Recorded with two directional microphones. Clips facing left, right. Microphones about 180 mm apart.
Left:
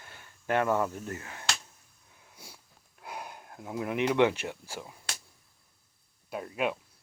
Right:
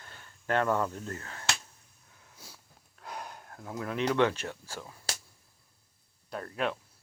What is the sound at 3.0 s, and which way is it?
Speech, 10° left (ahead or behind).